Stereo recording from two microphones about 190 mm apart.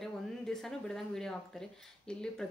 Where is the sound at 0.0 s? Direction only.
Centre (ahead or behind).